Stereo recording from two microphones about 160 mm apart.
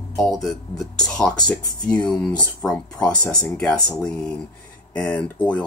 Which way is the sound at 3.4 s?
5° left (ahead or behind).